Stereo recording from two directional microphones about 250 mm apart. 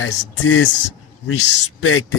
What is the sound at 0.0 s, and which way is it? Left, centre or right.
Speech, left.